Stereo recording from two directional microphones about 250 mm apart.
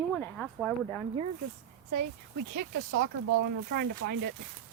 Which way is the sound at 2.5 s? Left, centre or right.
Right.